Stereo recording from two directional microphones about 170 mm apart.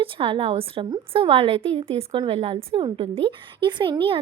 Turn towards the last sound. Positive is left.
turn(degrees=-30)  # may be behind; listen again after turning